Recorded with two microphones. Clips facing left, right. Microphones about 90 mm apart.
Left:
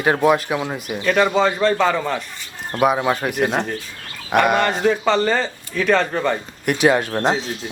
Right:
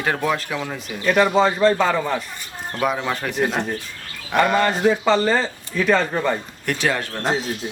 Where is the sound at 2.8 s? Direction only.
15° left (ahead or behind).